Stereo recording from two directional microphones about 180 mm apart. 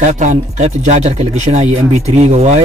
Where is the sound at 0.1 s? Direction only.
40° right (ahead or behind).